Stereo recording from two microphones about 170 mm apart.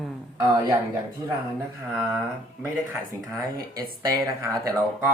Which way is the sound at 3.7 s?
20° right (ahead or behind).